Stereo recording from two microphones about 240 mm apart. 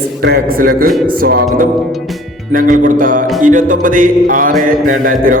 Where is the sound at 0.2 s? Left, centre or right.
Right.